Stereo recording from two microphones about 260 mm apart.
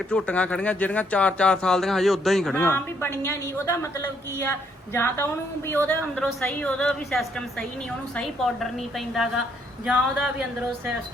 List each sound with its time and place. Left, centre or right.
0.1 s speech: centre